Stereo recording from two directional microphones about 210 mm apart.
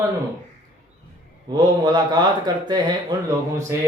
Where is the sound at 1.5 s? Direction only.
20° right (ahead or behind).